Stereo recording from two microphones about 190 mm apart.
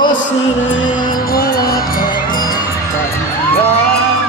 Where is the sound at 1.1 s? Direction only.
50° left (ahead or behind).